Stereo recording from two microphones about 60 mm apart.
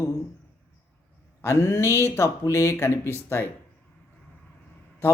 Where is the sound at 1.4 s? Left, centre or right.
Left.